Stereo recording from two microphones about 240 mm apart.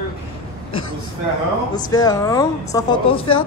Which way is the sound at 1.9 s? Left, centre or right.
Centre.